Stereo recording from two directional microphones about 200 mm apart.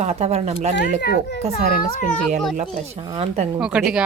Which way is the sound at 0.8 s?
50° left (ahead or behind).